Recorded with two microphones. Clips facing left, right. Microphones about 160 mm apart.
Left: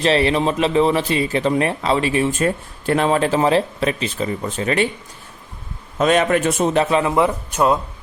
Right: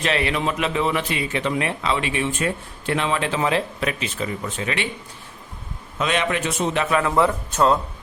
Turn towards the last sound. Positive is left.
turn(degrees=15)  # may be behind; listen again after turning